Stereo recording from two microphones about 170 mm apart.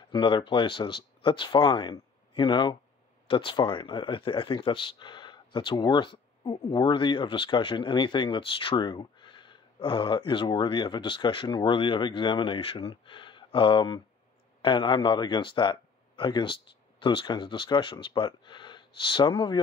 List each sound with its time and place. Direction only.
0.1 s speech: 30° left (ahead or behind)